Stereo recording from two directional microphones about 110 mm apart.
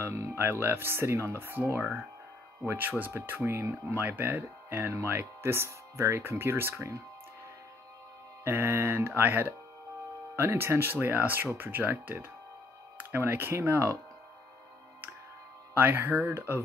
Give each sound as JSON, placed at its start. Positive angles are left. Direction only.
{"t": 0.0, "sound": "speech", "side_deg": -25}
{"t": 8.5, "sound": "speech", "side_deg": -20}
{"t": 15.7, "sound": "speech", "side_deg": -20}